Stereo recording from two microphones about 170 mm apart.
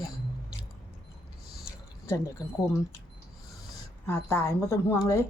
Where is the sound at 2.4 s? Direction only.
20° left (ahead or behind).